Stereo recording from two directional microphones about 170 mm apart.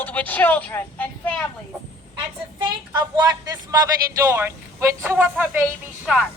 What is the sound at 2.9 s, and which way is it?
Speech, 25° right (ahead or behind).